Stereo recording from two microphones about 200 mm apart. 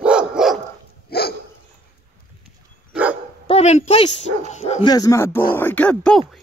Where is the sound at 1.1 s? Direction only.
50° left (ahead or behind).